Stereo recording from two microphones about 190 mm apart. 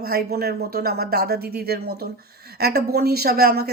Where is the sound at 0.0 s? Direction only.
55° right (ahead or behind).